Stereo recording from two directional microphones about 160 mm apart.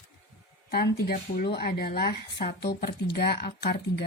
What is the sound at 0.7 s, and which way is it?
Speech, 80° left.